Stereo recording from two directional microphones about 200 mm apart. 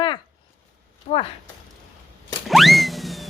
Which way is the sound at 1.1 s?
35° left (ahead or behind).